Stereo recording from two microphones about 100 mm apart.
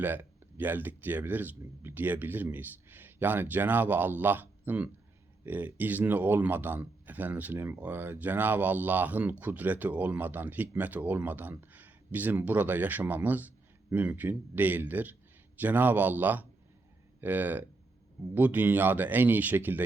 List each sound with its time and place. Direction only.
0.0 s speech: 20° right (ahead or behind)